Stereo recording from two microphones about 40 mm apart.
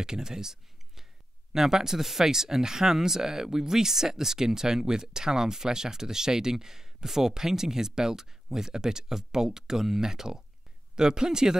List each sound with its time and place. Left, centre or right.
0.0 s speech: centre